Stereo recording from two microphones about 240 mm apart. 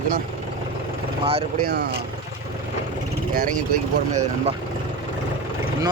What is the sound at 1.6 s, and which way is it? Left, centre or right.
Speech, right.